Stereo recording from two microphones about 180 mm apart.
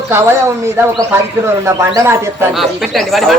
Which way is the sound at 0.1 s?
15° right (ahead or behind).